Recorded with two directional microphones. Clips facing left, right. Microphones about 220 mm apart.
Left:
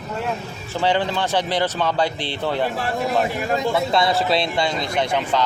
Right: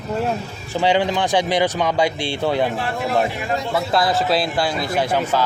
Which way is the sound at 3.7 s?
Centre (ahead or behind).